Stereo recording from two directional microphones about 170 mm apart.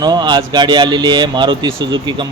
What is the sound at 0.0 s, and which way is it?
Speech, 25° right (ahead or behind).